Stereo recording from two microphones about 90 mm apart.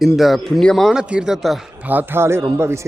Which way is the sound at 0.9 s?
10° right (ahead or behind).